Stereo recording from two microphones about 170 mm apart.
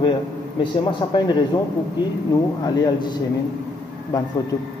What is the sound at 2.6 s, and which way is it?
Speech, 25° left (ahead or behind).